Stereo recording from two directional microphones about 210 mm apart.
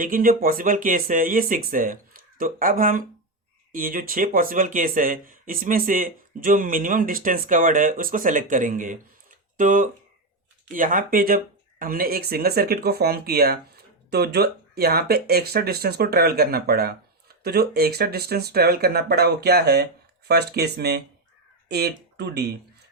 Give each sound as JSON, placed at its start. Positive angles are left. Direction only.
{"t": 0.0, "sound": "speech", "side_deg": -40}